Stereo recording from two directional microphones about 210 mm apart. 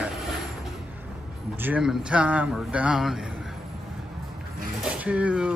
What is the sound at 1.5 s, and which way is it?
A man's voice, 10° right (ahead or behind).